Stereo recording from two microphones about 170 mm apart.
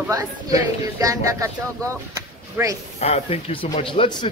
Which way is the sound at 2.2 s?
20° right (ahead or behind).